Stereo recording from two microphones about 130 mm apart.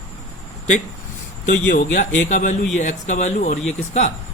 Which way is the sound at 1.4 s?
80° left.